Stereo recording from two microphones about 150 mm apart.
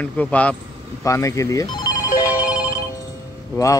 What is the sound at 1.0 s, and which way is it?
Speech, 20° left (ahead or behind).